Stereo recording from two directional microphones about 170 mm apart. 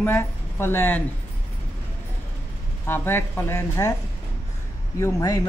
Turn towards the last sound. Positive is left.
turn(degrees=20)  # may be behind; listen again after turning